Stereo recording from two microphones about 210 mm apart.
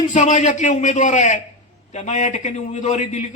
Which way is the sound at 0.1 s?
35° left (ahead or behind).